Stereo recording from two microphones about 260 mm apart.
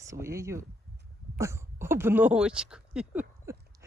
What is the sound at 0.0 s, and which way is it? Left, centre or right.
Speech, centre.